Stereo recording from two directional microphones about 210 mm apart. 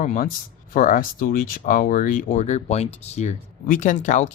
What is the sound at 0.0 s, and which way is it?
Speech, 35° left (ahead or behind).